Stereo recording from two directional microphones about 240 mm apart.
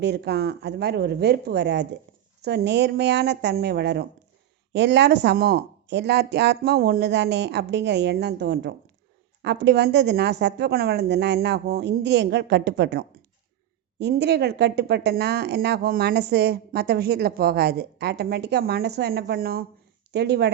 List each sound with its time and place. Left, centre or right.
0.0 s speech: right